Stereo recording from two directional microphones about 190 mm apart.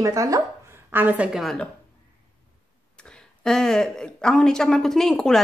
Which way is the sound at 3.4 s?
5° left (ahead or behind).